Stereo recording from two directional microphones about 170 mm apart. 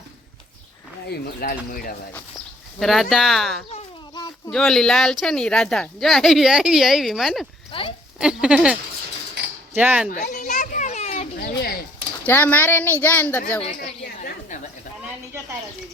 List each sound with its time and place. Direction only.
1.0 s speech: 65° left (ahead or behind)
2.7 s a woman's voice: centre (ahead or behind)
4.1 s a sound: 25° left (ahead or behind)
4.5 s a woman's voice: 5° left (ahead or behind)
7.7 s a sound: 30° left (ahead or behind)
8.2 s a woman's voice: 5° right (ahead or behind)
10.1 s children playing: 45° left (ahead or behind)
11.5 s a sound: 65° left (ahead or behind)
12.2 s speech: 10° left (ahead or behind)